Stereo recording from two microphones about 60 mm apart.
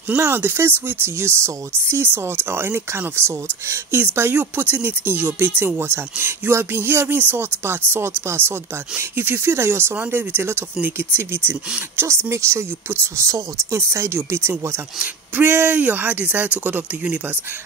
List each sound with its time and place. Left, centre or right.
0.2 s speech: right
7.2 s speech: right
15.7 s speech: right